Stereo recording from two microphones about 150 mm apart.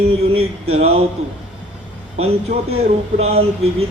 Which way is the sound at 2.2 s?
40° right (ahead or behind).